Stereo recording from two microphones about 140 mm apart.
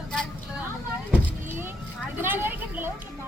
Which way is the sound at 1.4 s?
15° right (ahead or behind).